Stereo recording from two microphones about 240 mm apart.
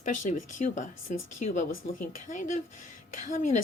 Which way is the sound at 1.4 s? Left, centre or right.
Left.